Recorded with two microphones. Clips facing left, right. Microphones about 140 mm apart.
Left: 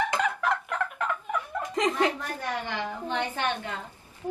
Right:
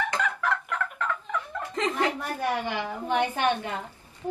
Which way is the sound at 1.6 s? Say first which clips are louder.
Left 2 dB; 15° left (ahead or behind).